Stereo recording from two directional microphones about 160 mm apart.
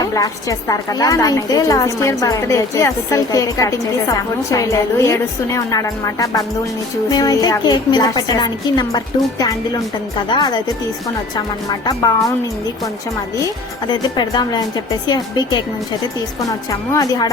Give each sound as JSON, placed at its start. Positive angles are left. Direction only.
{"t": 0.0, "sound": "a woman's voice", "side_deg": 20}
{"t": 13.3, "sound": "a woman's voice", "side_deg": 25}
{"t": 16.9, "sound": "a woman's voice", "side_deg": 25}